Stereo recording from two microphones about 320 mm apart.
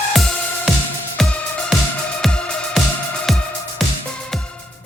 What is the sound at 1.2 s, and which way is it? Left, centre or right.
Music, centre.